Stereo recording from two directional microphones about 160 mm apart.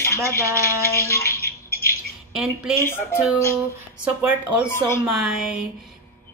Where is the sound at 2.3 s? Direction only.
5° right (ahead or behind).